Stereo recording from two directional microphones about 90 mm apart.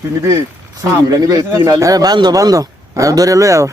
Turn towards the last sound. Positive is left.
turn(degrees=-35)  # may be behind; listen again after turning